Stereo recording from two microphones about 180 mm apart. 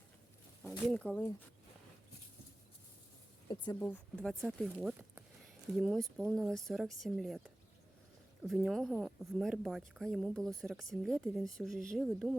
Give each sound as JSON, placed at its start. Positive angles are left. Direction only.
{"t": 0.9, "sound": "speech", "side_deg": 5}
{"t": 3.5, "sound": "speech", "side_deg": 25}
{"t": 3.8, "sound": "a woman's voice", "side_deg": 10}